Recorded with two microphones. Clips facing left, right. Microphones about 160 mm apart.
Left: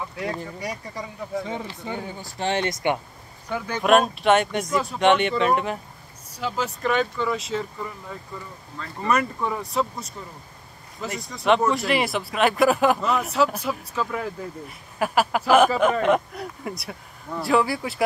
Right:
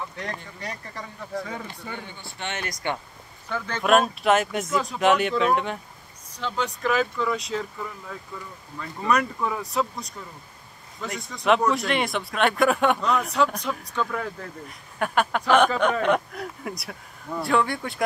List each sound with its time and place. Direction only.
0.1 s speech: 10° left (ahead or behind)
2.0 s speech: 35° left (ahead or behind); by 3.8 s 15° left (ahead or behind)
3.8 s speech: centre (ahead or behind)